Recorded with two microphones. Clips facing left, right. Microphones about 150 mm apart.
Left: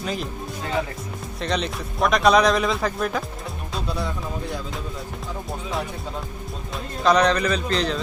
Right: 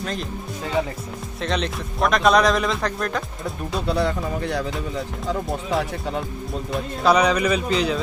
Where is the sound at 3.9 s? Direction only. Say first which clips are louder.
Right 7 dB; 70° right (ahead or behind).